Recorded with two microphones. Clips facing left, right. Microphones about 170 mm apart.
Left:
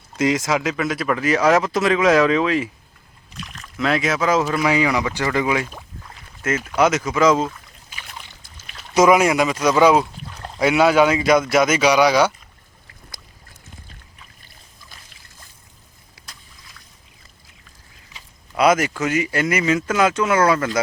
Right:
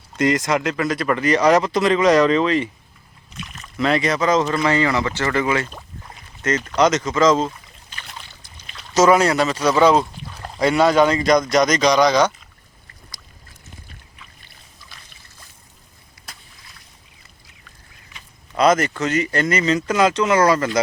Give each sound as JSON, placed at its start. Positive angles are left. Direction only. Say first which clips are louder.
{"t": 0.2, "sound": "speech", "louder": "right 1 dB", "side_deg": 0}
{"t": 14.2, "sound": "boat", "louder": "right 1 dB", "side_deg": 40}
{"t": 16.2, "sound": "boat", "louder": "right 3 dB", "side_deg": 90}
{"t": 18.5, "sound": "speech", "louder": "even", "side_deg": 5}